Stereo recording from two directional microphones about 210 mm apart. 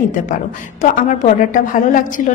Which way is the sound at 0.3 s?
35° left (ahead or behind).